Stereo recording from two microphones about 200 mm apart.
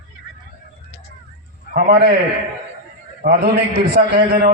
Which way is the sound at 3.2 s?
50° right (ahead or behind).